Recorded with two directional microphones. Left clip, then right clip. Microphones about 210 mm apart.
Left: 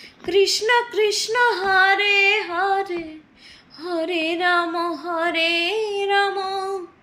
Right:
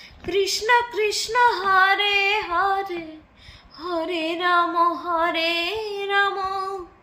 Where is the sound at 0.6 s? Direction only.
10° right (ahead or behind).